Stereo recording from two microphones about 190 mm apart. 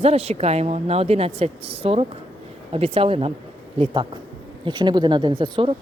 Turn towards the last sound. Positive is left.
turn(degrees=-25)  # may be behind; listen again after turning